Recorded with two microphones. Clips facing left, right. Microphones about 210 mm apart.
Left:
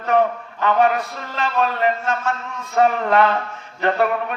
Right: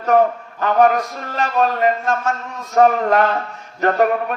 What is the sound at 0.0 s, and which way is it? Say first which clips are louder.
A man's voice: right 3 dB; 45° right (ahead or behind).